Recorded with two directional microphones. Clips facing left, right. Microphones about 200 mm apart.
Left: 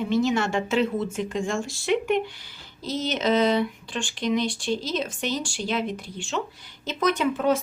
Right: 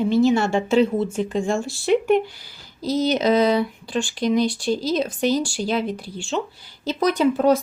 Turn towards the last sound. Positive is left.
turn(degrees=-35)  # may be behind; listen again after turning